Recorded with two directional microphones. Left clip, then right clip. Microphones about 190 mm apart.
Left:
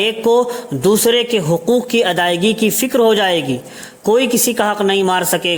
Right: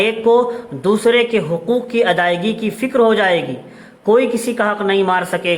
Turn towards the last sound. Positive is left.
turn(degrees=50)  # may be behind; listen again after turning